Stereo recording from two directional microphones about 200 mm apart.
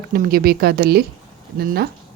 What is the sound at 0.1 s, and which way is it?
A woman's voice, 45° right (ahead or behind).